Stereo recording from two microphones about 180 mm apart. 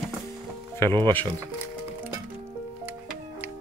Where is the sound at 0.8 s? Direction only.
15° left (ahead or behind).